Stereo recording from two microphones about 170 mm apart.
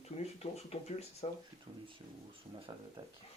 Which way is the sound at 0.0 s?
40° left (ahead or behind).